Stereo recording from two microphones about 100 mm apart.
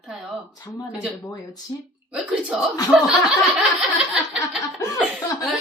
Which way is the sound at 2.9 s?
5° right (ahead or behind).